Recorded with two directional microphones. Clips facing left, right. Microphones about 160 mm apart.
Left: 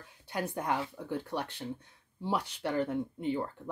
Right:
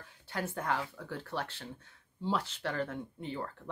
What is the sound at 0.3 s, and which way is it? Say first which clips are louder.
Speech: left 2 dB; 15° left (ahead or behind).